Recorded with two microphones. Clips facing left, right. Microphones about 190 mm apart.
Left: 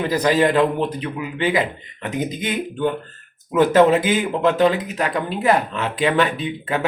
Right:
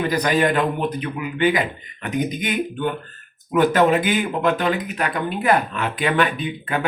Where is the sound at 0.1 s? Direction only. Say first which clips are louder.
Left 5 dB; 25° left (ahead or behind).